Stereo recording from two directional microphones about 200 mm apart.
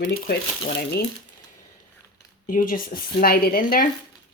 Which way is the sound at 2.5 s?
45° left (ahead or behind).